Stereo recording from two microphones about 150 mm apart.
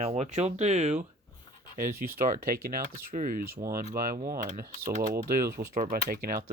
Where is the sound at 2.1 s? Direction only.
65° right (ahead or behind).